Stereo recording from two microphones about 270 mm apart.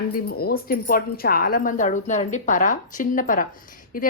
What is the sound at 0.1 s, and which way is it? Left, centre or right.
Speech, left.